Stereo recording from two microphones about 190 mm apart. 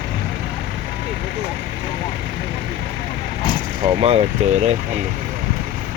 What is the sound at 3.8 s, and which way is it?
Speech, 30° right (ahead or behind).